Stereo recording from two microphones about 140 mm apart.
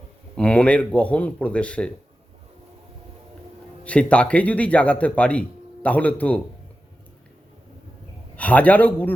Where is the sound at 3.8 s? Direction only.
10° left (ahead or behind).